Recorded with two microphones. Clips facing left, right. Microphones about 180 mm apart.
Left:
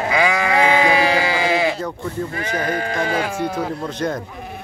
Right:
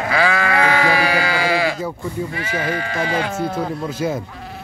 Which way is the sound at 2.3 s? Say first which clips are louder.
Left 1 dB; 45° left (ahead or behind).